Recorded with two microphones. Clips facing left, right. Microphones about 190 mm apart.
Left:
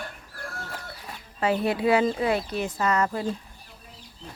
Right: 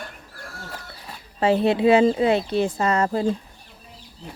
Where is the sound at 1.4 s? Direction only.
25° right (ahead or behind).